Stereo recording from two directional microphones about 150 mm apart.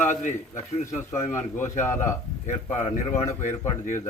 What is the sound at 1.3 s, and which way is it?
A man's voice, 15° left (ahead or behind).